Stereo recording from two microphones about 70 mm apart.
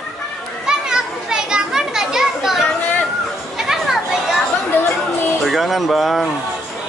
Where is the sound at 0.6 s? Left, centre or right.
Centre.